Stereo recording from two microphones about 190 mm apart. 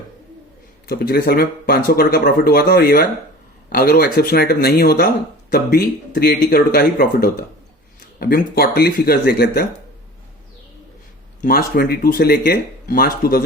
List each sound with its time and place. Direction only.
0.9 s speech: 55° left (ahead or behind)
11.3 s speech: 50° left (ahead or behind)